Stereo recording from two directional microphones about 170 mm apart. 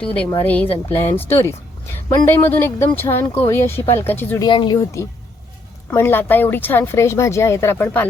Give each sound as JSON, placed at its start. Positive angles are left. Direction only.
{"t": 0.0, "sound": "speech", "side_deg": 10}
{"t": 4.4, "sound": "speech", "side_deg": 25}